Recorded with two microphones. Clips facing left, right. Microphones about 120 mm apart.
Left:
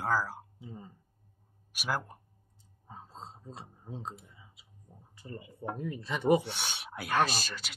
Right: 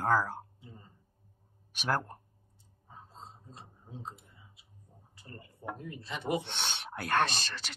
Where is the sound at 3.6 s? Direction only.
90° left.